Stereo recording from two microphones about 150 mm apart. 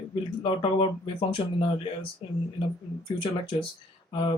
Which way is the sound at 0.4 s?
35° left (ahead or behind).